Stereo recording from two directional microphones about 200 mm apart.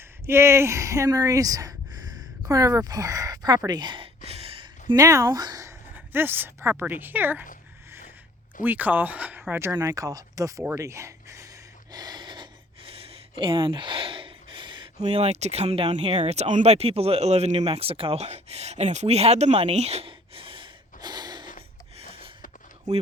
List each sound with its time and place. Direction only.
0.3 s speech: 15° right (ahead or behind)
4.3 s a sound: 30° right (ahead or behind)
4.9 s speech: 15° right (ahead or behind)
8.6 s speech: 10° right (ahead or behind)
11.9 s a sound: 20° right (ahead or behind)
17.7 s speech: 25° right (ahead or behind)